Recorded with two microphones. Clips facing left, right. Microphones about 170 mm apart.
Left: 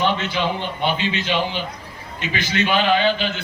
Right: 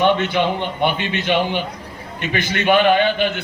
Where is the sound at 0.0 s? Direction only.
55° right (ahead or behind).